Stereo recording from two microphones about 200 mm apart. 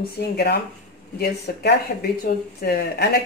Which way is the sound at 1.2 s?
55° left (ahead or behind).